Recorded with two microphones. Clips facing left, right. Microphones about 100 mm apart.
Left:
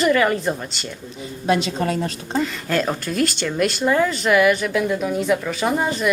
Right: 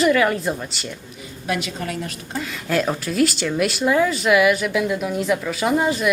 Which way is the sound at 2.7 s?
Centre (ahead or behind).